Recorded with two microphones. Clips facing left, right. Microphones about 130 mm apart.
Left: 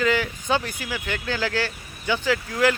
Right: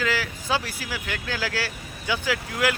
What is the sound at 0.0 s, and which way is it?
Speech, centre (ahead or behind).